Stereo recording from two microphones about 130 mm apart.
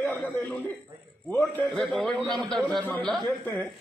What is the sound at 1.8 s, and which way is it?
A man's voice, centre (ahead or behind).